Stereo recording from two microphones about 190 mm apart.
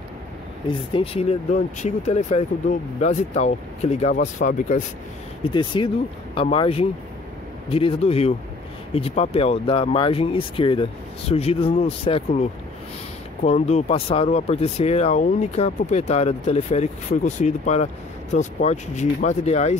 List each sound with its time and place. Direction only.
0.9 s speech: 30° left (ahead or behind)
5.4 s speech: 25° left (ahead or behind)